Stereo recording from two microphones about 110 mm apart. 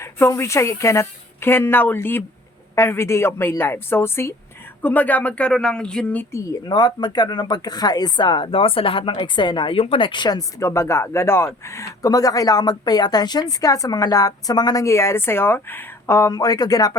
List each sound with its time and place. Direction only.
0.0 s speech: 25° left (ahead or behind)
6.7 s speech: 40° left (ahead or behind)
10.7 s a woman's voice: 25° left (ahead or behind)
16.3 s a woman's voice: 35° left (ahead or behind)